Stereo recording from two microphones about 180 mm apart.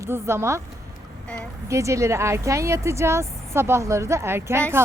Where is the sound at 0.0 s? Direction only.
15° right (ahead or behind).